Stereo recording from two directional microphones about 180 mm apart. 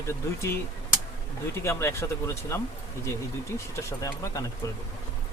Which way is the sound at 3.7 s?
15° left (ahead or behind).